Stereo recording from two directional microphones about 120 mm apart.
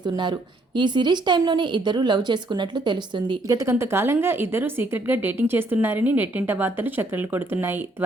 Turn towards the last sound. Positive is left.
turn(degrees=-15)  # may be behind; listen again after turning